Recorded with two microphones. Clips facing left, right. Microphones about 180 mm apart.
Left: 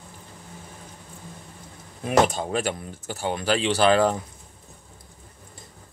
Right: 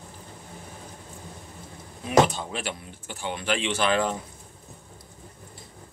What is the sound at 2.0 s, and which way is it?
Speech, 50° left (ahead or behind).